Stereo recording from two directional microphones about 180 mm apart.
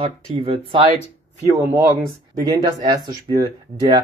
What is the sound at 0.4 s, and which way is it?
Speech, 30° right (ahead or behind).